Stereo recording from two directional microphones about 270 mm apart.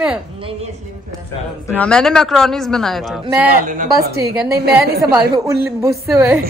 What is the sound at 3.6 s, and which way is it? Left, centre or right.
Speech, right.